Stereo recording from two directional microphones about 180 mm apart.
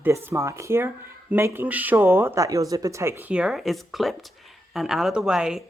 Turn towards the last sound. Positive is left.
turn(degrees=-5)  # may be behind; listen again after turning